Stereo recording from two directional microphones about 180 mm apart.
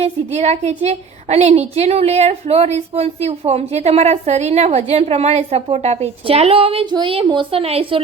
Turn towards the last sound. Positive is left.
turn(degrees=-30)  # may be behind; listen again after turning